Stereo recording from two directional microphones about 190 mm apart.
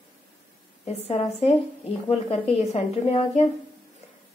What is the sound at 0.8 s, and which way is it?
Speech, 30° left (ahead or behind).